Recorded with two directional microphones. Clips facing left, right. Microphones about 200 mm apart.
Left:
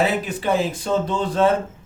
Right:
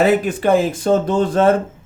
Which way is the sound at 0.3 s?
50° right (ahead or behind).